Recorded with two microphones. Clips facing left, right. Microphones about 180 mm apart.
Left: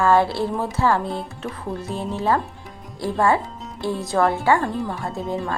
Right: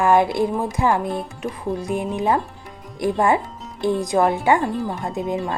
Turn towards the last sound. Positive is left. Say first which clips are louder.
# right 2 dB
turn(degrees=-20)  # may be behind; listen again after turning